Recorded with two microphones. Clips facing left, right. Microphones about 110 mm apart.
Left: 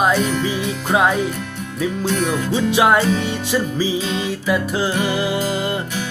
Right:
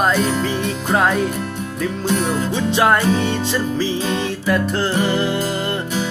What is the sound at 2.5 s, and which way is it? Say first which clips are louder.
Music: left 1 dB; 10° left (ahead or behind).